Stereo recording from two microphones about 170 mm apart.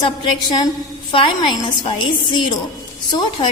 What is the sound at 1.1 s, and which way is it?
A woman's voice, 30° left (ahead or behind).